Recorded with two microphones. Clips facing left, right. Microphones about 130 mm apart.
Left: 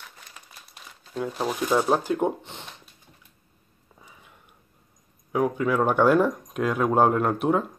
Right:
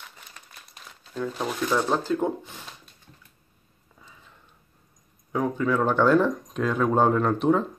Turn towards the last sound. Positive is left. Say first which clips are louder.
# right 1 dB
turn(degrees=10)  # may be behind; listen again after turning